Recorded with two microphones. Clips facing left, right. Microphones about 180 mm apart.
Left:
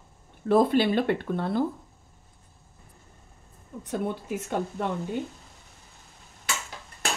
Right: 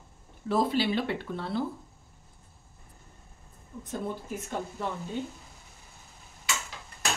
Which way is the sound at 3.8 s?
70° left (ahead or behind).